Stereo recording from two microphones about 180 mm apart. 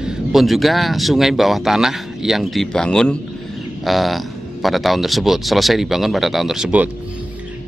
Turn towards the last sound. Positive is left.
turn(degrees=-5)  # may be behind; listen again after turning